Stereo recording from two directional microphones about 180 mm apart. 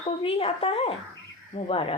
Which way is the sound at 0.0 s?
30° left (ahead or behind).